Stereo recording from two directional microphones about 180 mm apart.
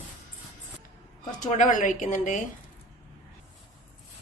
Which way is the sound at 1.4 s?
45° left (ahead or behind).